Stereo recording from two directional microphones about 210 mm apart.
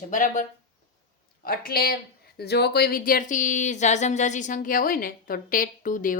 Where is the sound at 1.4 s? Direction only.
45° left (ahead or behind).